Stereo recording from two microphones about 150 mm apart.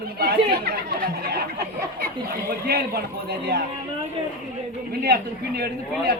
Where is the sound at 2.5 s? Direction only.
90° right.